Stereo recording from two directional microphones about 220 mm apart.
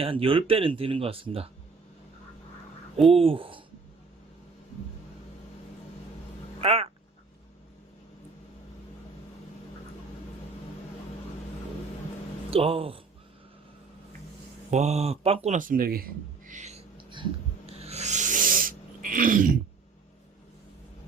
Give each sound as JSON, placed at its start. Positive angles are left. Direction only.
{"t": 0.0, "sound": "speech", "side_deg": -25}
{"t": 3.1, "sound": "speech", "side_deg": -25}
{"t": 6.6, "sound": "speech", "side_deg": -25}
{"t": 12.5, "sound": "speech", "side_deg": -25}
{"t": 14.7, "sound": "speech", "side_deg": -30}
{"t": 15.4, "sound": "speech", "side_deg": -35}
{"t": 16.5, "sound": "a sound", "side_deg": -30}